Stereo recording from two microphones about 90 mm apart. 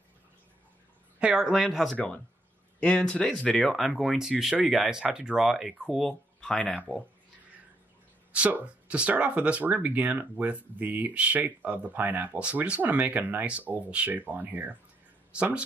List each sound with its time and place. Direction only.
1.2 s speech: 5° right (ahead or behind)
2.0 s speech: 15° left (ahead or behind)
3.5 s speech: centre (ahead or behind)
8.3 s a woman's voice: 15° right (ahead or behind)